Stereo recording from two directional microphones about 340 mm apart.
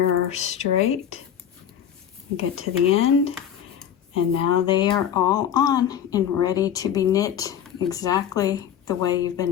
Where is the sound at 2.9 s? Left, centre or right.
Centre.